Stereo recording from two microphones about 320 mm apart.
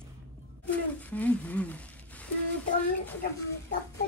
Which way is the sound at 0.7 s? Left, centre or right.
Centre.